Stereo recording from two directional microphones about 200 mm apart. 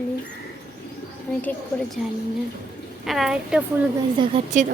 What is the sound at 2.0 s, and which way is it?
A woman's voice, centre (ahead or behind).